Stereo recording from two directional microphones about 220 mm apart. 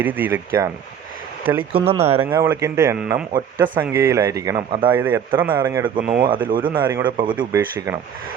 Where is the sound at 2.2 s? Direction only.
10° right (ahead or behind).